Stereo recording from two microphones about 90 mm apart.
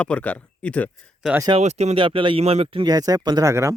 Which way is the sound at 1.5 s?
75° right (ahead or behind).